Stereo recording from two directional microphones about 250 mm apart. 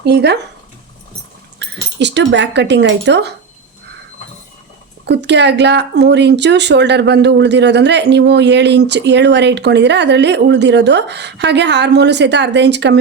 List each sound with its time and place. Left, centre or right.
0.0 s speech: right
1.5 s speech: right
5.0 s a woman's voice: right